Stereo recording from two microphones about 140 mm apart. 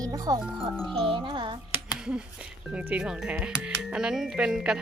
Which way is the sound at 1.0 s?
35° right (ahead or behind).